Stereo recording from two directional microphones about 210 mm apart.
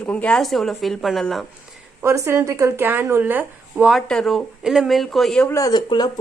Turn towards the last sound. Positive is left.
turn(degrees=20)  # may be behind; listen again after turning